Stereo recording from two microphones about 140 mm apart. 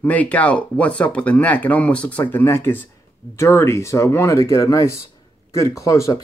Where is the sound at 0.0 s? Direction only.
10° left (ahead or behind).